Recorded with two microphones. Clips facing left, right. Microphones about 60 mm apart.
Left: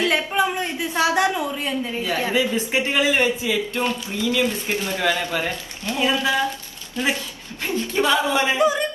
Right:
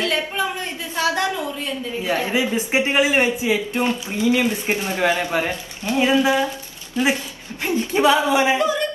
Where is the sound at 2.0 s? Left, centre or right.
Right.